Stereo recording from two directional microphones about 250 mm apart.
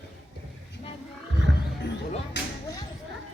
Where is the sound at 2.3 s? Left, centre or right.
Left.